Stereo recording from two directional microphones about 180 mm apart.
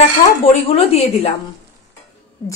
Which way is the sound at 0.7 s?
35° left (ahead or behind).